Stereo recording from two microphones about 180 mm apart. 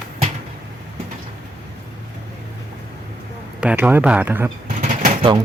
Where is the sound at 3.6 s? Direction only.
10° right (ahead or behind).